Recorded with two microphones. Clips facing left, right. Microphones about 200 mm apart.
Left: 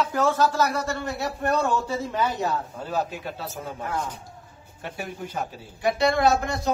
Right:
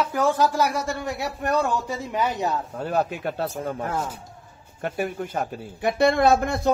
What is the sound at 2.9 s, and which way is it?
Speech, 60° right (ahead or behind).